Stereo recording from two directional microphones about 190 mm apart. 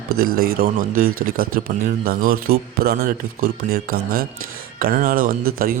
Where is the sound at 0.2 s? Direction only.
50° right (ahead or behind).